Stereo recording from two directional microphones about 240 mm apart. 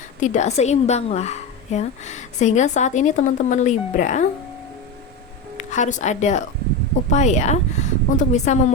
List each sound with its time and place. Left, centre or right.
0.2 s a woman's voice: left
5.5 s a woman's voice: left